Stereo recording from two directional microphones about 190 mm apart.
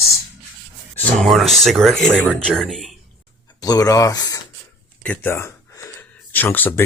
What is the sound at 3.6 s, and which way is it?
Speech, 20° left (ahead or behind).